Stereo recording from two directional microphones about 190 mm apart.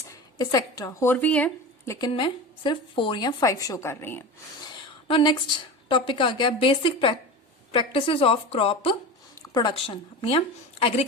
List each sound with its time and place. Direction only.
0.1 s speech: 20° left (ahead or behind)
1.9 s a woman's voice: 20° left (ahead or behind)
5.0 s a woman's voice: 25° left (ahead or behind)
9.3 s a woman's voice: 20° left (ahead or behind)